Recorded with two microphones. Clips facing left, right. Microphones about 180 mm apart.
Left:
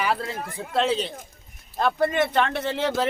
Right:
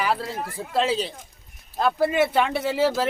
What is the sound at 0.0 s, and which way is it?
Speech, centre (ahead or behind).